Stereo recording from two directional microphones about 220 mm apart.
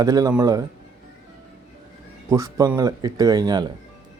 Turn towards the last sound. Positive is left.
turn(degrees=-20)  # may be behind; listen again after turning